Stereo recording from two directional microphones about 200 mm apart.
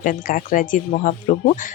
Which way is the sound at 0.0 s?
40° left (ahead or behind).